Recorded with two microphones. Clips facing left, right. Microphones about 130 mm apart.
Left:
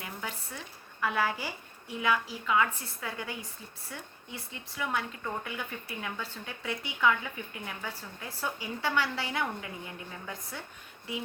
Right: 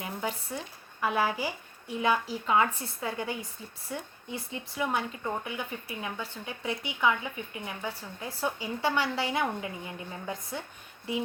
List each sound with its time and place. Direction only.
0.0 s a sound: 20° right (ahead or behind)
1.0 s speech: 20° right (ahead or behind)
2.0 s a woman's voice: 30° right (ahead or behind)